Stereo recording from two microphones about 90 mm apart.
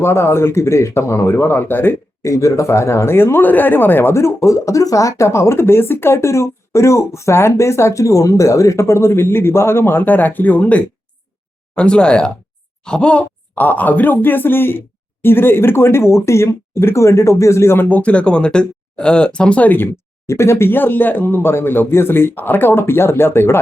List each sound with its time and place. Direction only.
0.0 s speech: 30° left (ahead or behind)
2.3 s speech: 35° left (ahead or behind)